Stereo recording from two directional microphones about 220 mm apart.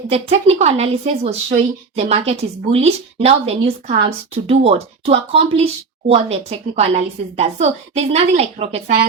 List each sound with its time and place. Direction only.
0.1 s speech: 30° right (ahead or behind)